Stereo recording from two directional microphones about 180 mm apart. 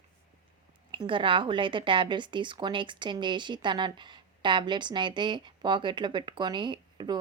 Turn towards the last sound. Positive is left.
turn(degrees=-25)  # may be behind; listen again after turning